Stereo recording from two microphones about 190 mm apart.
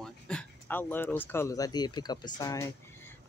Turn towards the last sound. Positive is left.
turn(degrees=15)  # may be behind; listen again after turning